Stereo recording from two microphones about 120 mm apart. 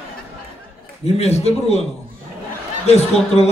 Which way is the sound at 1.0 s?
60° left (ahead or behind).